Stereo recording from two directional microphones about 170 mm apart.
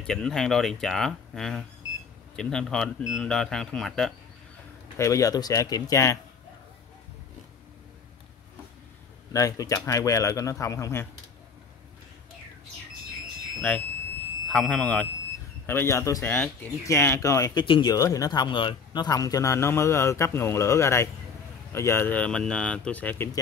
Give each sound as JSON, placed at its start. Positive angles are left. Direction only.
{"t": 0.0, "sound": "speech", "side_deg": 5}
{"t": 4.9, "sound": "speech", "side_deg": 20}
{"t": 9.3, "sound": "speech", "side_deg": 20}
{"t": 13.6, "sound": "speech", "side_deg": 10}